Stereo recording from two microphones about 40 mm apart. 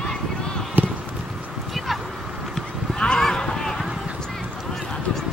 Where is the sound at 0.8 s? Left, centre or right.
Right.